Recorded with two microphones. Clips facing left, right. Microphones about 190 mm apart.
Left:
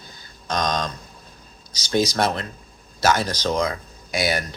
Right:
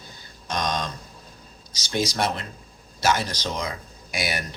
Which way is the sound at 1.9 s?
40° left (ahead or behind).